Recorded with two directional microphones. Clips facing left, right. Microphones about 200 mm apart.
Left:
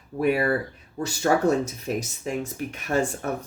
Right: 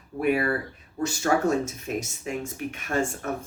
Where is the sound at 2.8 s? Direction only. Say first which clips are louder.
Left 3 dB; 35° left (ahead or behind).